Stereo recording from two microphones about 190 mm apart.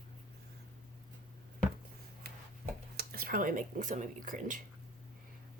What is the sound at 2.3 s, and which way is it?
Chopping, 55° right (ahead or behind).